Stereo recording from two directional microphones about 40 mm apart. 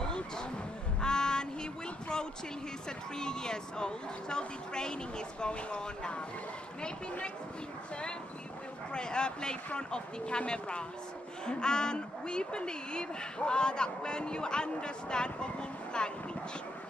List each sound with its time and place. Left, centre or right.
1.0 s a sound: centre
3.2 s speech: centre
8.9 s speech: left